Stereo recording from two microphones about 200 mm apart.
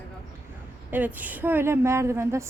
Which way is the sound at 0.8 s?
10° right (ahead or behind).